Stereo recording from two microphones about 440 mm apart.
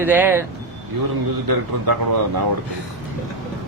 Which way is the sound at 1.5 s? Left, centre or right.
Right.